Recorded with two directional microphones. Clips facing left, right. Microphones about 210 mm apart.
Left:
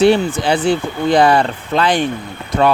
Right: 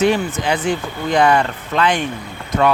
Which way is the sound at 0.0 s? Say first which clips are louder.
Left 4 dB; 30° left (ahead or behind).